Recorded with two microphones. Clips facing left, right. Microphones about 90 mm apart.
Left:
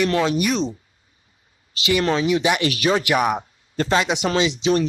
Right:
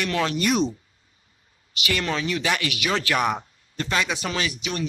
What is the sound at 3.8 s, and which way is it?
Speech, 30° left (ahead or behind).